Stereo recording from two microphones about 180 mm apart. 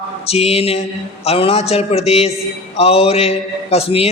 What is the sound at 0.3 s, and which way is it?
A man's voice, 35° left (ahead or behind).